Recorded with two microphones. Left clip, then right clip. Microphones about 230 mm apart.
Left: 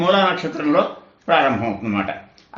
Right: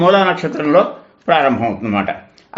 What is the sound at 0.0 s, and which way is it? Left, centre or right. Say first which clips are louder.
A man's voice: right 5 dB; right.